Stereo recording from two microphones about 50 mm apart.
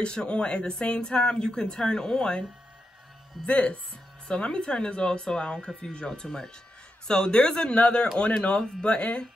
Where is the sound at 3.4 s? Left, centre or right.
Left.